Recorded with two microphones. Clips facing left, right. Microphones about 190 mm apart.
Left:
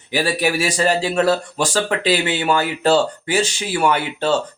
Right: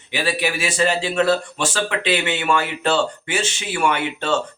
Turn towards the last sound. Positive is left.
turn(degrees=35)  # may be behind; listen again after turning